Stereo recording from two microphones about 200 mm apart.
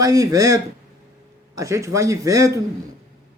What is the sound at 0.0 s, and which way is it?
Speech, 20° right (ahead or behind).